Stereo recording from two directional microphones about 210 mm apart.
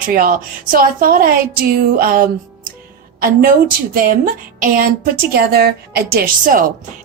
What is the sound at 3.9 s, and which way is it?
A woman's voice, 40° right (ahead or behind).